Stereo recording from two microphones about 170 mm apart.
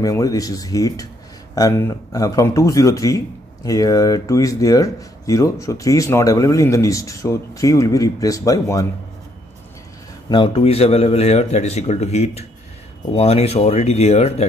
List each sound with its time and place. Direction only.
0.0 s speech: 20° left (ahead or behind)
10.3 s speech: 30° left (ahead or behind)